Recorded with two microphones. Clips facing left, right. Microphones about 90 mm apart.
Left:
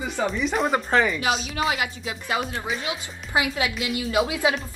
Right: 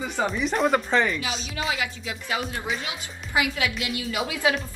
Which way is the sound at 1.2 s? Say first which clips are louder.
Left 5 dB; 45° left (ahead or behind).